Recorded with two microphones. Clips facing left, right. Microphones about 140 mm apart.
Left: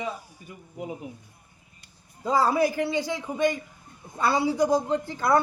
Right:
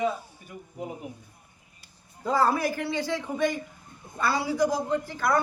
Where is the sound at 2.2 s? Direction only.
20° left (ahead or behind).